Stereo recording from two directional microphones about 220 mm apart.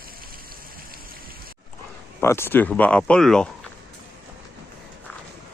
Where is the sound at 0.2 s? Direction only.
40° right (ahead or behind).